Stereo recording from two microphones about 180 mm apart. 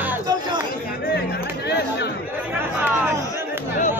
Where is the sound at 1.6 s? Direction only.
70° left (ahead or behind).